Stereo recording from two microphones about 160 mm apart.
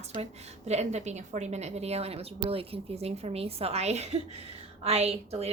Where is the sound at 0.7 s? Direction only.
45° right (ahead or behind).